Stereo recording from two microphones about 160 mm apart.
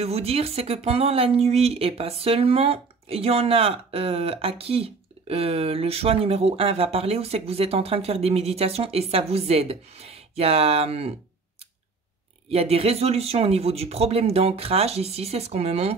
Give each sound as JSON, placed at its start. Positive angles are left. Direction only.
{"t": 0.0, "sound": "speech", "side_deg": -40}
{"t": 12.4, "sound": "speech", "side_deg": -40}